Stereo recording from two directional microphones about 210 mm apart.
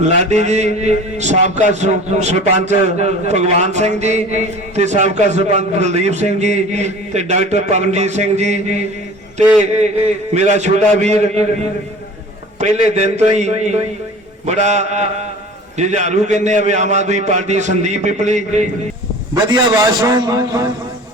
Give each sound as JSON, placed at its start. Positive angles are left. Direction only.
{"t": 0.0, "sound": "a man's voice", "side_deg": -35}
{"t": 10.3, "sound": "a man's voice", "side_deg": -35}
{"t": 12.5, "sound": "a man's voice", "side_deg": -35}
{"t": 20.0, "sound": "speech", "side_deg": -20}